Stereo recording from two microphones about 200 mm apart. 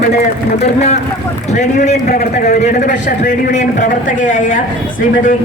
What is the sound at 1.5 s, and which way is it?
A man's voice, 35° left (ahead or behind).